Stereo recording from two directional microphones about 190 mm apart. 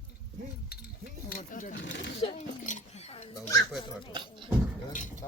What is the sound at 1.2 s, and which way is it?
Speech, 45° left (ahead or behind).